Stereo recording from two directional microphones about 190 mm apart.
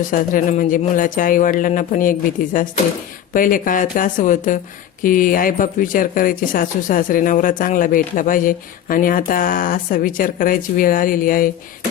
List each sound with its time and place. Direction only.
0.1 s speech: 40° left (ahead or behind)